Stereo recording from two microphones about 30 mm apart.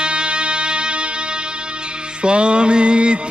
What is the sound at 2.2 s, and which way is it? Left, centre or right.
Music, right.